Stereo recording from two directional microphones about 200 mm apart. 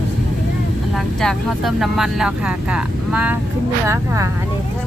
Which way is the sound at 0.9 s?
Centre (ahead or behind).